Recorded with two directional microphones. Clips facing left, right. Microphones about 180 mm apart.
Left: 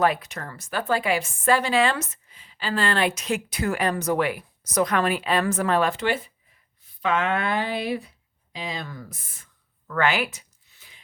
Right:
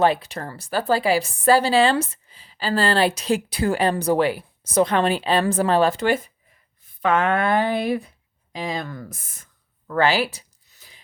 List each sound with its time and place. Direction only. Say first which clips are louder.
0.0 s speech: right 3 dB; 30° right (ahead or behind)